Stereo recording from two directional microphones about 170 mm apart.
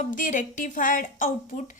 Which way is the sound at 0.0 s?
50° left (ahead or behind).